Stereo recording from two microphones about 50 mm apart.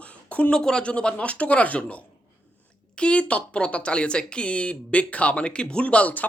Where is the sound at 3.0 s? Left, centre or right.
Left.